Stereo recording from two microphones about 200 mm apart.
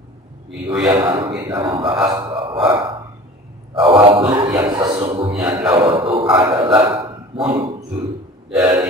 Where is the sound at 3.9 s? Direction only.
25° right (ahead or behind).